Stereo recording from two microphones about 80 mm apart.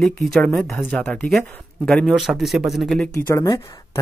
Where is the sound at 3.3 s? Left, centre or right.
Left.